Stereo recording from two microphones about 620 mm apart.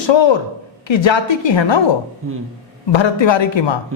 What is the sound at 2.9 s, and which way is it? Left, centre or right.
Speech, left.